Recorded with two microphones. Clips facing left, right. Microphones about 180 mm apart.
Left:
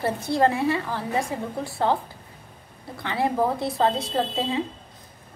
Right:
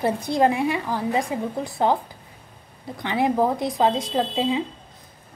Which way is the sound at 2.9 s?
15° right (ahead or behind).